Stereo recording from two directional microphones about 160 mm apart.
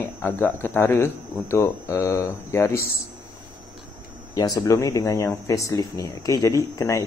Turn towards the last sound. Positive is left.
turn(degrees=20)  # may be behind; listen again after turning